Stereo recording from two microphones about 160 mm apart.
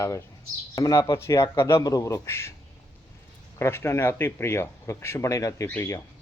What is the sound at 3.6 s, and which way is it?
Speech, 15° left (ahead or behind).